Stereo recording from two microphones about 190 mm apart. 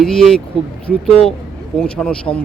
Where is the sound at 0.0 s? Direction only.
Centre (ahead or behind).